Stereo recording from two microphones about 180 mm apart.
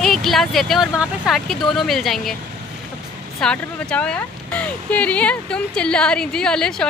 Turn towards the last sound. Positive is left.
turn(degrees=5)  # may be behind; listen again after turning